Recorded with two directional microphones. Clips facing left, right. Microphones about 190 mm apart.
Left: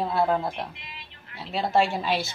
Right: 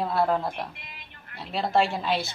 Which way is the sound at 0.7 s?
50° right (ahead or behind).